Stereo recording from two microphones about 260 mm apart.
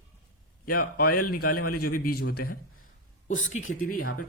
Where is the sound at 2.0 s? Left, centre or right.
Left.